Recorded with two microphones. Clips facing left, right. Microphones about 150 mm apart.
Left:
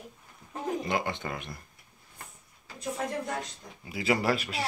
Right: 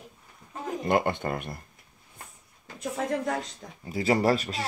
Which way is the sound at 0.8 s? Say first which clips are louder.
Right 6 dB; 50° right (ahead or behind).